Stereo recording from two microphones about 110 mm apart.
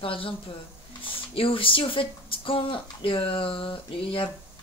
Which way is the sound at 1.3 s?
55° left (ahead or behind).